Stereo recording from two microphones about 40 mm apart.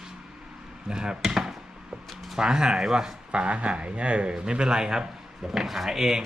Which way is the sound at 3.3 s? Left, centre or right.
Right.